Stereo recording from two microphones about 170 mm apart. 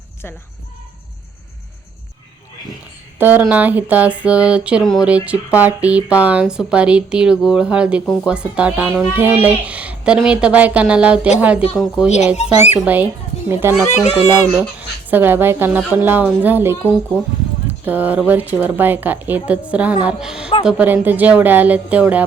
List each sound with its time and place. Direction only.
3.2 s speech: 10° right (ahead or behind)
8.0 s speech: 5° left (ahead or behind)
8.3 s speech: 5° right (ahead or behind)
12.4 s speech: 40° left (ahead or behind)
12.8 s speech: 10° right (ahead or behind)
13.8 s speech: 40° left (ahead or behind)
14.8 s speech: 10° right (ahead or behind)
17.8 s speech: 10° right (ahead or behind)